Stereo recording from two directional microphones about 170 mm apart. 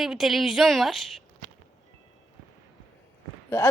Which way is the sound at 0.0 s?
Centre (ahead or behind).